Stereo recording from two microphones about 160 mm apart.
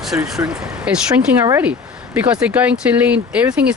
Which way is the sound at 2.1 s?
10° right (ahead or behind).